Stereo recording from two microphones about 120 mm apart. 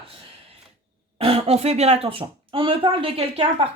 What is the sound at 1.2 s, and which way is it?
Speech, 55° right (ahead or behind).